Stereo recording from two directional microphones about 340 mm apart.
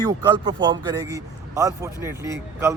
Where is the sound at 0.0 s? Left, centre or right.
Centre.